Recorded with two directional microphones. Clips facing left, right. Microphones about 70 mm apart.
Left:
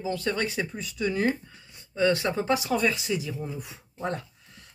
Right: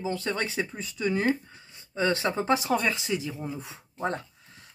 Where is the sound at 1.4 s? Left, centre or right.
Right.